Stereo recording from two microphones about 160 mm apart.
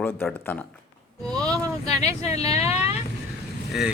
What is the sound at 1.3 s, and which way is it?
Music, 20° right (ahead or behind).